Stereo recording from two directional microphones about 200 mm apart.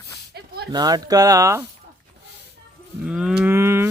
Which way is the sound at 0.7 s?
20° right (ahead or behind).